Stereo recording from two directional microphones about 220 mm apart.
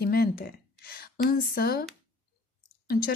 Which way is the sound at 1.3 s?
45° left (ahead or behind).